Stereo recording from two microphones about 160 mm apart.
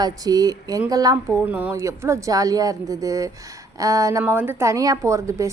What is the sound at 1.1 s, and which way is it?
A woman's voice, 10° right (ahead or behind).